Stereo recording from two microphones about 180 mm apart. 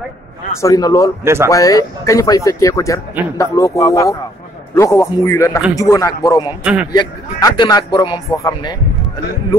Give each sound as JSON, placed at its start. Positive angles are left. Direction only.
{"t": 0.6, "sound": "speech", "side_deg": 20}
{"t": 1.2, "sound": "speech", "side_deg": -15}
{"t": 1.5, "sound": "speech", "side_deg": 20}
{"t": 6.6, "sound": "a man's voice", "side_deg": -5}
{"t": 7.0, "sound": "speech", "side_deg": 20}